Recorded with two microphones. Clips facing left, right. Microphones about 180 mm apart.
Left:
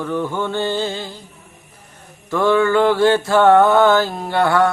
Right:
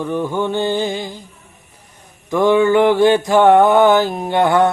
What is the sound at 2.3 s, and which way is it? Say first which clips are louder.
Mantra: right 3 dB; 15° right (ahead or behind).